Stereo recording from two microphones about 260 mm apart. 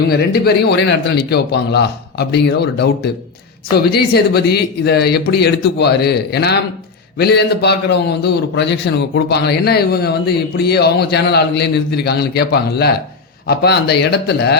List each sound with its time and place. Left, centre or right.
0.1 s a man's voice: left
3.9 s a man's voice: left